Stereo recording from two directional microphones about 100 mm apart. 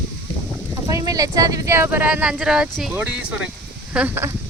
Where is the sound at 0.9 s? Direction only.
35° right (ahead or behind).